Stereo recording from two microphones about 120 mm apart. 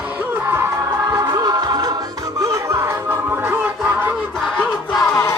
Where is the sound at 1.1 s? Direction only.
30° right (ahead or behind).